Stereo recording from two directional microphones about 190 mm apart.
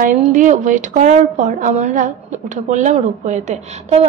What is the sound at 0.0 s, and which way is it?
A woman's voice, 40° right (ahead or behind).